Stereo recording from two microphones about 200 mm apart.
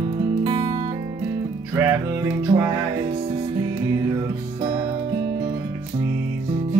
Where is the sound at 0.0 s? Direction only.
20° right (ahead or behind).